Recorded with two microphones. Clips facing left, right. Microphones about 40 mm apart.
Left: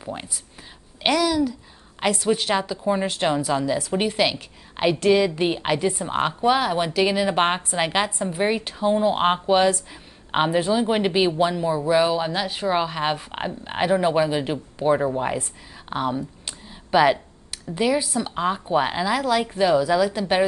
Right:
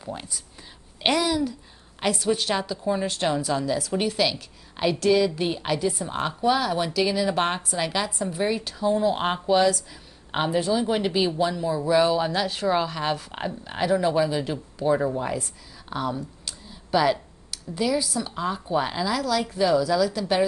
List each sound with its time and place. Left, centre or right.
0.0 s a woman's voice: left
1.1 s a woman's voice: right
2.0 s a woman's voice: left